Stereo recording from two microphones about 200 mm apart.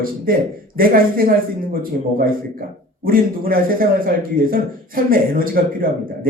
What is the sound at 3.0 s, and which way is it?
A man's voice, 45° right (ahead or behind).